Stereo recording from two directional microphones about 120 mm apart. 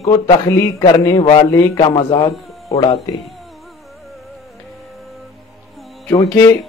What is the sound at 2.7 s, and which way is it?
Speech, 55° left (ahead or behind).